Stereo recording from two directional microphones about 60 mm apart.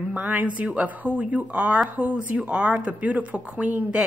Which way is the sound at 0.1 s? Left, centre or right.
Right.